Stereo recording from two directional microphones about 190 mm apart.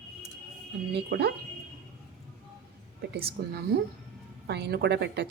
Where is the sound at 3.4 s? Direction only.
55° right (ahead or behind).